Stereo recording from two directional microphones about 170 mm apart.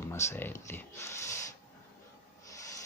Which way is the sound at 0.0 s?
15° left (ahead or behind).